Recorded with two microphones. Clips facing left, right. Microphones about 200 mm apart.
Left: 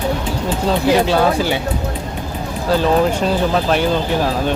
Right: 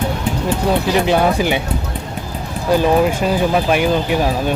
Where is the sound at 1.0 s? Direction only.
15° right (ahead or behind).